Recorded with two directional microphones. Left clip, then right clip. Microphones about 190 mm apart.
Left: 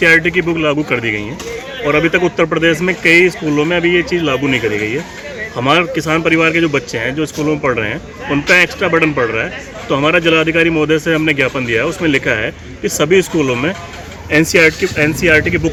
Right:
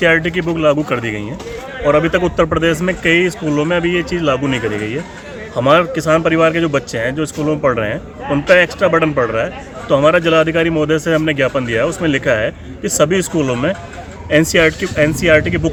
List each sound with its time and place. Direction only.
0.0 s speech: 20° right (ahead or behind)